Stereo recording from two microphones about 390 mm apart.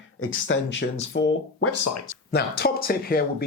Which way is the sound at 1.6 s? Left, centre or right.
Left.